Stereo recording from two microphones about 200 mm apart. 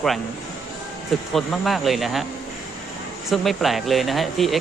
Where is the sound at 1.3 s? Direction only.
Centre (ahead or behind).